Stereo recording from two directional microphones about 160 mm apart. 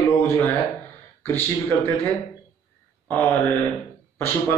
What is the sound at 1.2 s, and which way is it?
A man's voice, 15° left (ahead or behind).